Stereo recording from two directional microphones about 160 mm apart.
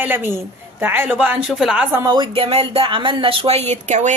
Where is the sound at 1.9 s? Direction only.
20° right (ahead or behind).